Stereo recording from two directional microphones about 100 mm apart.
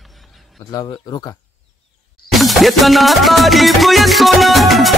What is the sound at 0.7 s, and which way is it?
Speech, 35° left (ahead or behind).